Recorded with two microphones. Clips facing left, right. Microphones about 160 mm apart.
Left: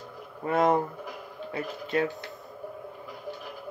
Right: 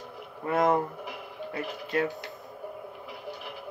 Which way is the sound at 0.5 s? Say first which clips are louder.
Left 1 dB; 25° left (ahead or behind).